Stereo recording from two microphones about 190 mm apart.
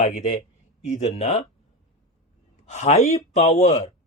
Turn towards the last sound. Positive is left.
turn(degrees=35)  # may be behind; listen again after turning